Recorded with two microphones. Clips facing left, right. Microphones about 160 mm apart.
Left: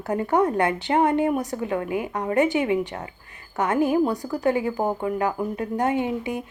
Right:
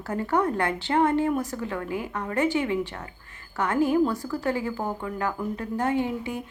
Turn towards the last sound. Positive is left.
turn(degrees=15)  # may be behind; listen again after turning